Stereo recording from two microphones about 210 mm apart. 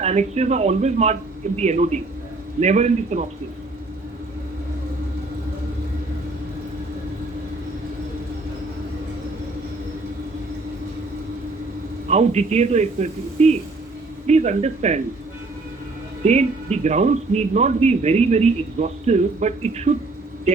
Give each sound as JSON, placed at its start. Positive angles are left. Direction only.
{"t": 0.0, "sound": "speech", "side_deg": -30}
{"t": 12.0, "sound": "speech", "side_deg": -30}
{"t": 16.2, "sound": "speech", "side_deg": -30}